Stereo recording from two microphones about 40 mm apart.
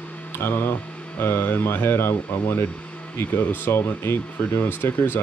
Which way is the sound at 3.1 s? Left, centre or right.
Left.